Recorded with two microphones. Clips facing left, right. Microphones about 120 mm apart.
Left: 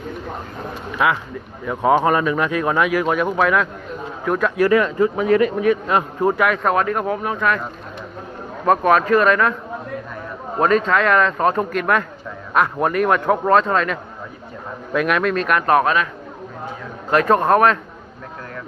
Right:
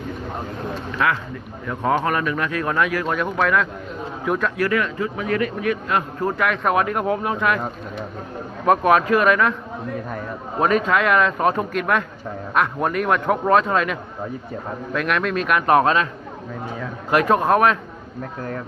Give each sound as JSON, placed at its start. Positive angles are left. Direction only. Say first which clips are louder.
{"t": 0.9, "sound": "speech", "louder": "left 3 dB", "side_deg": 20}
{"t": 4.4, "sound": "a man's voice", "louder": "left 8 dB", "side_deg": 25}
{"t": 6.4, "sound": "a man's voice", "louder": "right 1 dB", "side_deg": 0}
{"t": 6.7, "sound": "speech", "louder": "even", "side_deg": -15}
{"t": 8.6, "sound": "speech", "louder": "left 1 dB", "side_deg": -10}
{"t": 10.6, "sound": "a man's voice", "louder": "left 2 dB", "side_deg": -5}
{"t": 15.6, "sound": "speech", "louder": "right 1 dB", "side_deg": -25}
{"t": 17.1, "sound": "a man's voice", "louder": "left 2 dB", "side_deg": -10}